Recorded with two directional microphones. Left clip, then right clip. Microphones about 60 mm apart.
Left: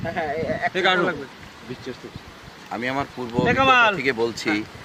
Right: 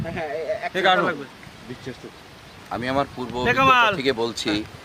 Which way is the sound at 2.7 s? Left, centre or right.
Right.